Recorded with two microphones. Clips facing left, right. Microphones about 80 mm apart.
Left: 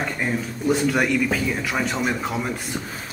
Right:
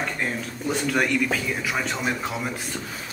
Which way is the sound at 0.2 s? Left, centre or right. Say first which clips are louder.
Left 4 dB; centre.